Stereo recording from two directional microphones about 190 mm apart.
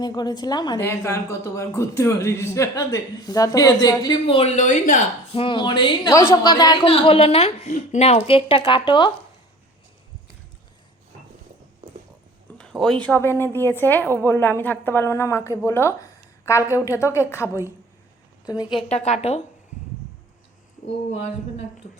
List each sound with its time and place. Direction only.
0.0 s a woman's voice: 20° left (ahead or behind); by 4.9 s 40° left (ahead or behind)
5.3 s a woman's voice: 30° left (ahead or behind)
12.5 s a woman's voice: 5° left (ahead or behind); by 18.8 s 20° left (ahead or behind)
19.0 s speech: 35° left (ahead or behind)
21.1 s speech: 35° left (ahead or behind)